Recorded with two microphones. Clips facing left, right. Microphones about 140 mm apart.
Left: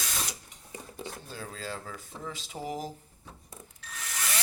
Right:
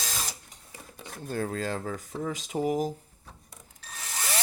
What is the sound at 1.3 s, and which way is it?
Speech, 55° right (ahead or behind).